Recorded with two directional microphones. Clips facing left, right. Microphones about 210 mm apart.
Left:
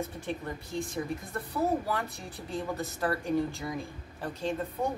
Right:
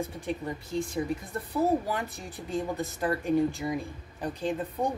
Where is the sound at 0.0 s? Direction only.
15° right (ahead or behind).